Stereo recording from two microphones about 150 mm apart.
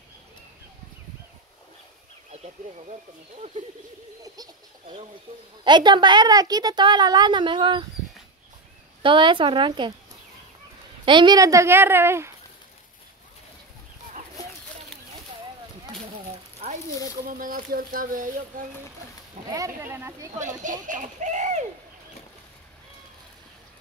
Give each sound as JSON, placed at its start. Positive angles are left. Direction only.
{"t": 5.6, "sound": "a woman's voice", "side_deg": -30}
{"t": 9.0, "sound": "a woman's voice", "side_deg": -35}
{"t": 11.1, "sound": "a woman's voice", "side_deg": -30}
{"t": 17.3, "sound": "speech", "side_deg": -70}
{"t": 19.5, "sound": "a woman's voice", "side_deg": -20}
{"t": 20.3, "sound": "a child's voice", "side_deg": -55}